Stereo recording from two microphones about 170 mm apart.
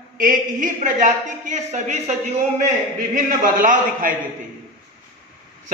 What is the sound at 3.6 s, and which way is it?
Speech, 50° right (ahead or behind).